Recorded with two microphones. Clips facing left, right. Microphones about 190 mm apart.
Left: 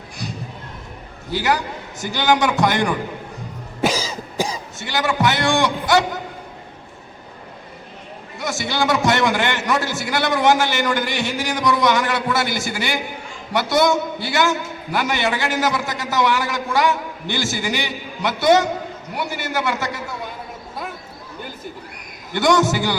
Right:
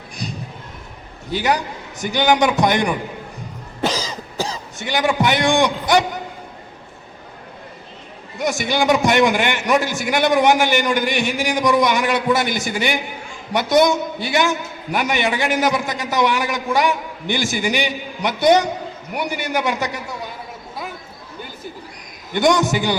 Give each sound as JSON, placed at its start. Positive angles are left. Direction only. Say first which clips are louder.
{"t": 0.2, "sound": "a sound", "louder": "right 1 dB", "side_deg": -15}
{"t": 1.3, "sound": "a man's voice", "louder": "right 1 dB", "side_deg": -20}
{"t": 3.8, "sound": "cough", "louder": "left 1 dB", "side_deg": 10}
{"t": 4.8, "sound": "a man's voice", "louder": "right 2 dB", "side_deg": -15}
{"t": 8.4, "sound": "a man's voice", "louder": "right 3 dB", "side_deg": -15}
{"t": 22.3, "sound": "a man's voice", "louder": "even", "side_deg": -15}